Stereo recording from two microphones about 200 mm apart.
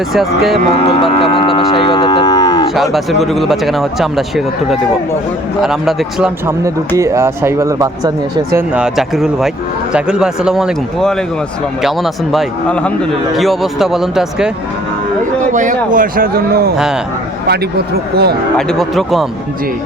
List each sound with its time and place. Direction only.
0.1 s a man's voice: centre (ahead or behind)
1.0 s cattle: 25° left (ahead or behind)
2.7 s a man's voice: centre (ahead or behind)
6.9 s speech: 15° right (ahead or behind)
8.5 s a man's voice: 5° right (ahead or behind)
15.5 s speech: 40° right (ahead or behind)
16.7 s a man's voice: 5° right (ahead or behind)
17.5 s speech: 55° right (ahead or behind)
18.5 s a man's voice: centre (ahead or behind)